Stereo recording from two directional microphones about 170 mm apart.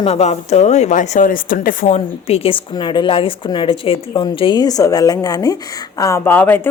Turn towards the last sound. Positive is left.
turn(degrees=10)  # may be behind; listen again after turning